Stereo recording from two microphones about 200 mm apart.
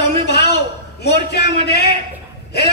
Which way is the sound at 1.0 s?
55° left (ahead or behind).